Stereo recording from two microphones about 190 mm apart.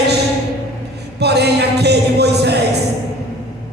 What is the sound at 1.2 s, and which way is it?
Music, 60° right (ahead or behind).